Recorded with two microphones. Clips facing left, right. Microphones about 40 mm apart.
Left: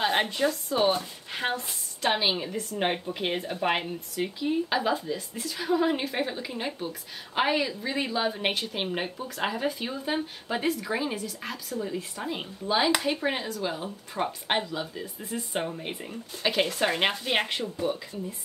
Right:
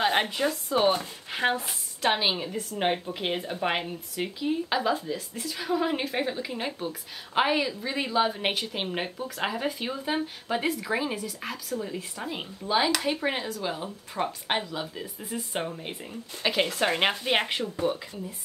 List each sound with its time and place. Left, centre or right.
0.0 s a woman's voice: centre
2.0 s a woman's voice: centre
4.7 s a woman's voice: centre
15.8 s speech: centre
16.4 s a woman's voice: centre
17.6 s speech: right